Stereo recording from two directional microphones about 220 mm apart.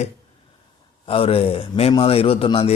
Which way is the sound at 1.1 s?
25° left (ahead or behind).